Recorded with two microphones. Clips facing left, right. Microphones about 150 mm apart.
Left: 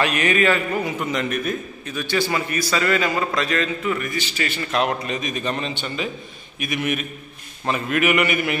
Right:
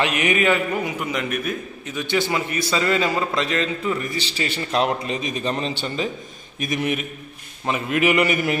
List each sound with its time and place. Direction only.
0.0 s a man's voice: 15° right (ahead or behind)
1.9 s a man's voice: 20° right (ahead or behind); by 6.9 s 35° right (ahead or behind)
7.6 s a man's voice: 20° right (ahead or behind); by 8.5 s 35° right (ahead or behind)